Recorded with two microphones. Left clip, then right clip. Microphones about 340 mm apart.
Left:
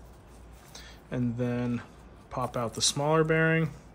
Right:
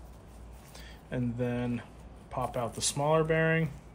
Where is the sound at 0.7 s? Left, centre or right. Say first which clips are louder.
Left 1 dB; centre.